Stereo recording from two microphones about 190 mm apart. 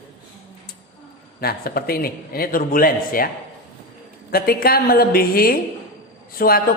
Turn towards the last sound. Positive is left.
turn(degrees=50)  # may be behind; listen again after turning